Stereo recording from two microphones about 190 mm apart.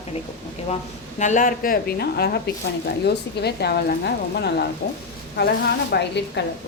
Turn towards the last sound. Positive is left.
turn(degrees=65)  # may be behind; listen again after turning